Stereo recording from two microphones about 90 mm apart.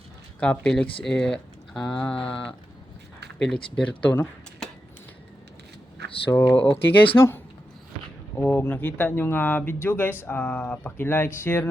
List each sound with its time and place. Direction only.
0.6 s speech: 10° left (ahead or behind)
6.3 s speech: 20° left (ahead or behind)
8.4 s speech: 25° left (ahead or behind)